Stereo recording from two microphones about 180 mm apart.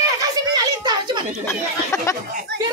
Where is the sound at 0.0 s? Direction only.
20° right (ahead or behind).